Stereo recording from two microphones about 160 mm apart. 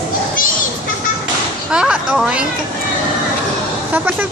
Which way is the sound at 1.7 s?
5° right (ahead or behind).